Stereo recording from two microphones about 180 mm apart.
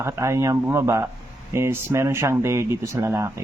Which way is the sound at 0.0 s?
15° right (ahead or behind).